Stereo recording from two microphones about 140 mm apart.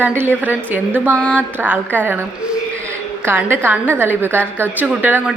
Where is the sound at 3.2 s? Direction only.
15° right (ahead or behind).